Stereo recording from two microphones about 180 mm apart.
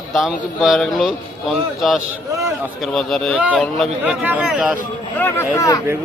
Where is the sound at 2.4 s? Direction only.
15° right (ahead or behind).